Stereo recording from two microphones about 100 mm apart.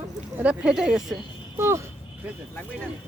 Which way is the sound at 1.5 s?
30° right (ahead or behind).